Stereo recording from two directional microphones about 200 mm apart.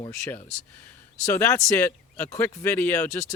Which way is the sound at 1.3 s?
10° left (ahead or behind).